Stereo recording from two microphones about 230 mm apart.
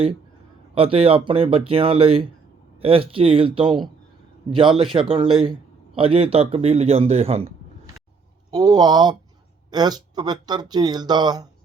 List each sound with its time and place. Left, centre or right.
0.7 s speech: right
4.8 s speech: right
8.4 s speech: centre